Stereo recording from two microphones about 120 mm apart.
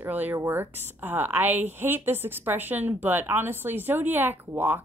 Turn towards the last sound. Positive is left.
turn(degrees=-15)  # may be behind; listen again after turning